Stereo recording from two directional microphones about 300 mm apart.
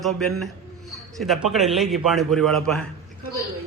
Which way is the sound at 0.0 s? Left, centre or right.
Centre.